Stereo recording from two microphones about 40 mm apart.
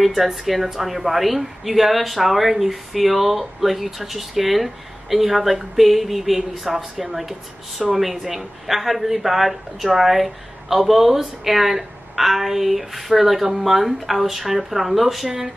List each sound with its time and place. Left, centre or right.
0.0 s speech: centre